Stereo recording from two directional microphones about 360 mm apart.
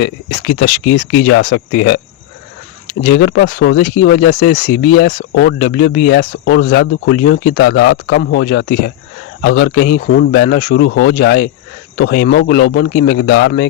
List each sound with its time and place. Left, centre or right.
0.6 s speech: left
3.0 s speech: left